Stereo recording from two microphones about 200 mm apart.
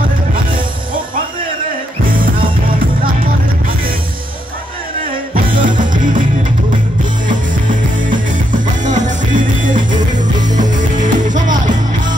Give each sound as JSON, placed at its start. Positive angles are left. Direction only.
{"t": 5.3, "sound": "music", "side_deg": -40}
{"t": 8.1, "sound": "music", "side_deg": -40}